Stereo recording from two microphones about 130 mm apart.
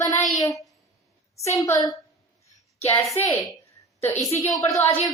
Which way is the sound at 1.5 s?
25° left (ahead or behind).